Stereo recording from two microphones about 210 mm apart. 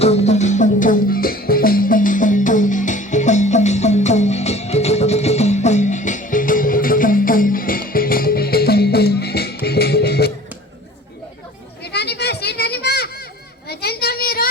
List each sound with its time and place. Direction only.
0.0 s music: 30° left (ahead or behind); by 10.3 s 50° left (ahead or behind)
11.8 s children playing: 50° left (ahead or behind)
13.7 s a sound: 50° left (ahead or behind)